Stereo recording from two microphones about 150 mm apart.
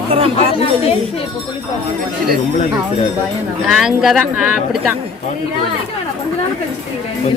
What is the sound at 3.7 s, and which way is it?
Speech, centre (ahead or behind).